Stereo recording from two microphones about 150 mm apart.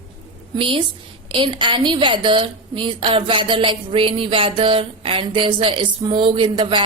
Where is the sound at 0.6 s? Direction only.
35° right (ahead or behind).